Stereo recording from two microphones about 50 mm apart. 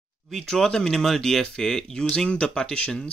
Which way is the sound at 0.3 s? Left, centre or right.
Centre.